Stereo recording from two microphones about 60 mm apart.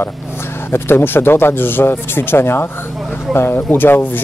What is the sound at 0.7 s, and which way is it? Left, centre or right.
Speech, left.